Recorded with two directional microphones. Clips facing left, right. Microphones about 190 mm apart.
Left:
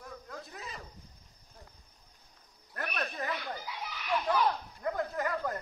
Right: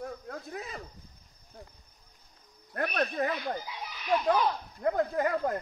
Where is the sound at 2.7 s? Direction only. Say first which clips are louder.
Right 7 dB; 45° right (ahead or behind).